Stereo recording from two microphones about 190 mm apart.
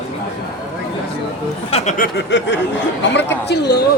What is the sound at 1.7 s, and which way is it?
Speech, 30° left (ahead or behind).